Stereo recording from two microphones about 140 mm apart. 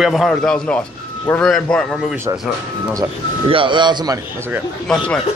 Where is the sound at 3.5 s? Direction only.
35° right (ahead or behind).